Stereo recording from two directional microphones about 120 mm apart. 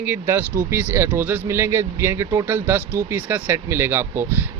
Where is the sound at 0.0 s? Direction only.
15° right (ahead or behind).